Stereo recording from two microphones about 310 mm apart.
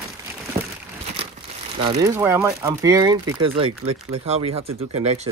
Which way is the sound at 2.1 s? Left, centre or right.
Centre.